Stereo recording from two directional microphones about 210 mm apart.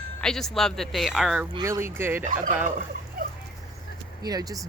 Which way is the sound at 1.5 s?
15° right (ahead or behind).